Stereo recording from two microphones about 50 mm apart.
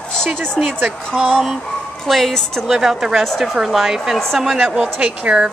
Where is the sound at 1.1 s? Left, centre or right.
Centre.